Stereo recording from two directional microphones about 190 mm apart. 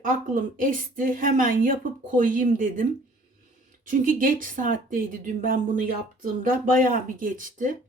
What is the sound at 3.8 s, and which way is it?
Speech, 45° right (ahead or behind).